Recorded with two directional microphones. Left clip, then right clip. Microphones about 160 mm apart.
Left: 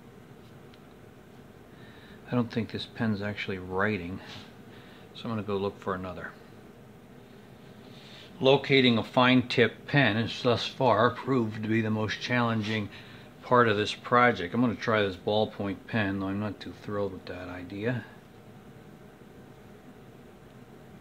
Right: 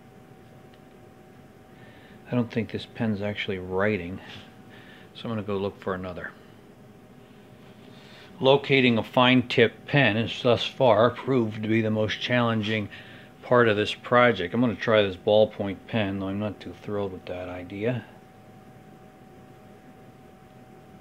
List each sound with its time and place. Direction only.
2.2 s speech: 15° right (ahead or behind)
5.1 s speech: 20° right (ahead or behind)
8.4 s speech: 20° right (ahead or behind)